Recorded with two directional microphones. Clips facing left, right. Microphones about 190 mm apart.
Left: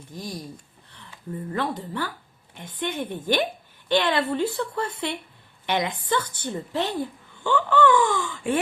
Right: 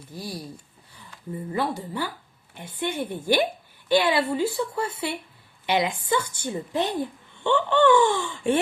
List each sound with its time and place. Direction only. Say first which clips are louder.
0.1 s speech: even; 10° right (ahead or behind); by 8.5 s 30° right (ahead or behind)